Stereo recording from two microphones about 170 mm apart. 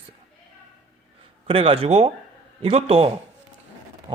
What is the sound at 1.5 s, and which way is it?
Speech, 30° right (ahead or behind).